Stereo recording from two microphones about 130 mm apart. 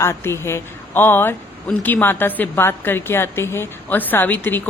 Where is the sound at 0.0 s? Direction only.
20° left (ahead or behind).